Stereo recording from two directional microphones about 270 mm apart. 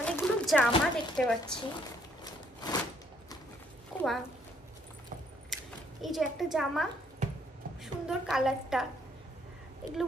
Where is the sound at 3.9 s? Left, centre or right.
Centre.